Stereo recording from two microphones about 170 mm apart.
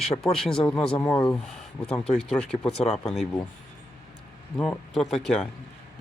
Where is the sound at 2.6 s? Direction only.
35° left (ahead or behind).